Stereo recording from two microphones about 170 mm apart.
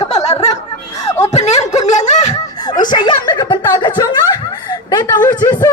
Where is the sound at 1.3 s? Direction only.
40° left (ahead or behind).